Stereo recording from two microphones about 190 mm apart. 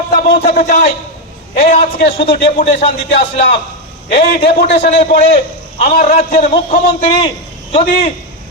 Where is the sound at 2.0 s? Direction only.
65° left (ahead or behind).